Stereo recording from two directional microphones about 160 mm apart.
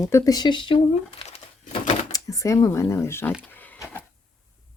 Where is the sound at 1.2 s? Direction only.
40° left (ahead or behind).